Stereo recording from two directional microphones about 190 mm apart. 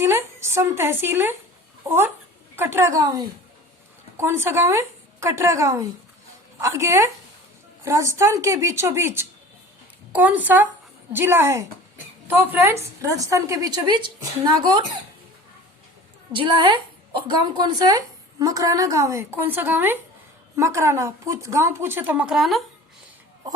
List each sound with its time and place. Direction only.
0.0 s a woman's voice: 10° right (ahead or behind)
2.6 s a woman's voice: 15° right (ahead or behind)
16.3 s a woman's voice: 25° right (ahead or behind); by 22.6 s centre (ahead or behind)